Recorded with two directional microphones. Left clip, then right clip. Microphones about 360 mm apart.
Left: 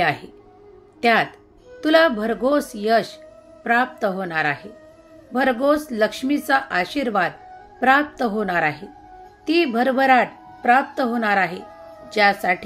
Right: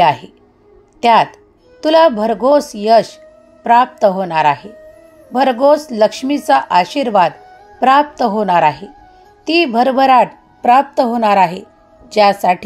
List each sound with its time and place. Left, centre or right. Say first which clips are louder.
0.0 s a woman's voice: right 9 dB; centre